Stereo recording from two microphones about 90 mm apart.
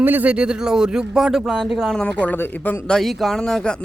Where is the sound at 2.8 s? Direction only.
5° left (ahead or behind).